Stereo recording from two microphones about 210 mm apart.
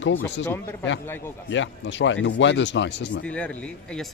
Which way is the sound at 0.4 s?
10° left (ahead or behind).